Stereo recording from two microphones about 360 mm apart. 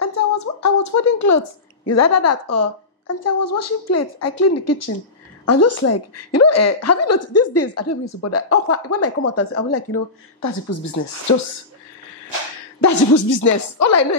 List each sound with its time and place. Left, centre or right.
0.0 s a woman's voice: left
12.8 s a woman's voice: left